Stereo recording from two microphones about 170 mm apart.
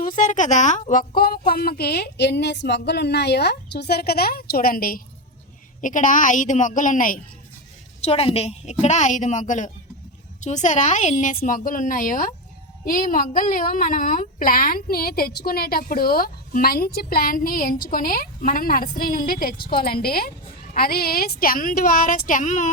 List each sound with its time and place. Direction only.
0.2 s a woman's voice: 45° left (ahead or behind)
8.0 s a woman's voice: 35° left (ahead or behind)